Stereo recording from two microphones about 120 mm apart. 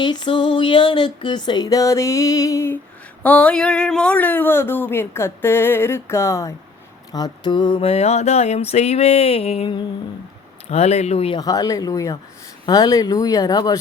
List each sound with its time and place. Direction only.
0.0 s music: 40° left (ahead or behind)
3.2 s speech: 10° left (ahead or behind)
7.1 s a sound: 35° left (ahead or behind); by 11.3 s 60° left (ahead or behind)
11.3 s speech: 30° left (ahead or behind)
12.6 s music: 30° left (ahead or behind)